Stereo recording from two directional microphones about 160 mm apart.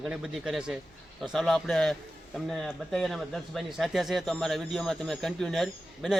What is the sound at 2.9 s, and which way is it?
A man's voice, centre (ahead or behind).